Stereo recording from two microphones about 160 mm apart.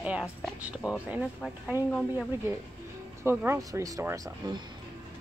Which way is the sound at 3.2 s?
15° right (ahead or behind).